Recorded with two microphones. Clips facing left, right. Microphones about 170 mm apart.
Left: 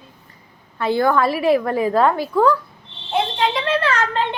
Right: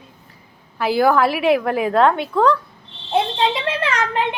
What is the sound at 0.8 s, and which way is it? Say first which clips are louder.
A woman's voice: right 1 dB; 5° right (ahead or behind).